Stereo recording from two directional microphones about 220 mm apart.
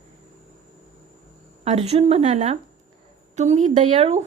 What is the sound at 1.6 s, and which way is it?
Speech, 30° right (ahead or behind).